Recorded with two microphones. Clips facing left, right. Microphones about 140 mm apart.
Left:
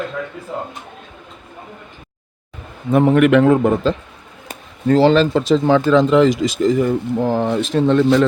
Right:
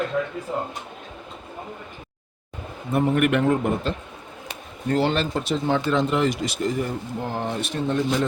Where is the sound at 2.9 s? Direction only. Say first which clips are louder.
Left 8 dB; 90° left.